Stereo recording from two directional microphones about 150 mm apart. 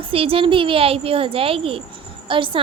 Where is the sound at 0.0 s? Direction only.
40° right (ahead or behind).